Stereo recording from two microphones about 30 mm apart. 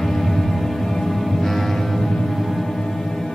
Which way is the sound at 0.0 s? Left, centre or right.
Centre.